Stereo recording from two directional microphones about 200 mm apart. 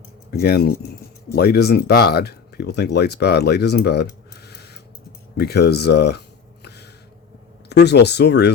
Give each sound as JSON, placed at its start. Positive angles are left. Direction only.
{"t": 0.3, "sound": "speech", "side_deg": 50}
{"t": 5.4, "sound": "a sound", "side_deg": 55}
{"t": 7.7, "sound": "speech", "side_deg": 55}